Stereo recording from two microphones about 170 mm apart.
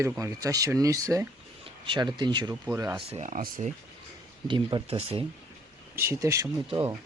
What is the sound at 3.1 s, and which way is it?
Speech, 45° right (ahead or behind).